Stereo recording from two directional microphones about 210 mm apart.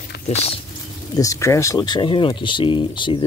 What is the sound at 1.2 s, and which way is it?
Speech, 15° left (ahead or behind).